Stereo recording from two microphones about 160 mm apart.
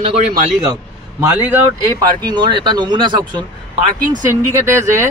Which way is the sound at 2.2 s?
30° right (ahead or behind).